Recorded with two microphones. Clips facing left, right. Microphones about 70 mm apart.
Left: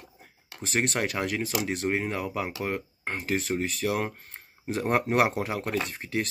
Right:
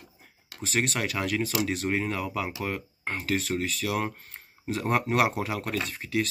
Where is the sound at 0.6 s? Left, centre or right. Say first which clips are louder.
Even; left.